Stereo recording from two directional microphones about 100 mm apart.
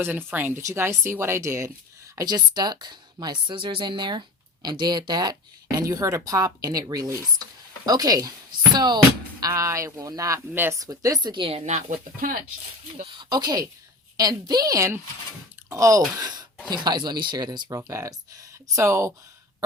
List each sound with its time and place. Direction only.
0.0 s speech: 20° right (ahead or behind)
0.6 s speech: 30° right (ahead or behind)
2.1 s a woman's voice: 45° right (ahead or behind)
9.4 s speech: 35° right (ahead or behind)
10.5 s speech: 20° right (ahead or behind)
10.8 s speech: 35° right (ahead or behind)
11.4 s speech: 90° right
13.0 s a woman's voice: 55° right (ahead or behind); by 19.1 s 30° right (ahead or behind)